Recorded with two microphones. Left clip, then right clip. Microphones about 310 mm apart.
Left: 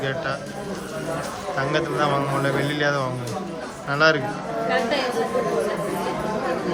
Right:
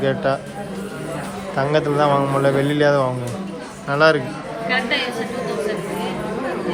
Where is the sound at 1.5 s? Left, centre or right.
Centre.